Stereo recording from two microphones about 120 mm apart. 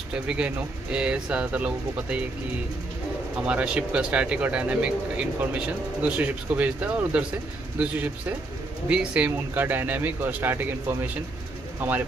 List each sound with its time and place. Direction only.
0.1 s speech: 10° right (ahead or behind)
3.4 s speech: 10° right (ahead or behind)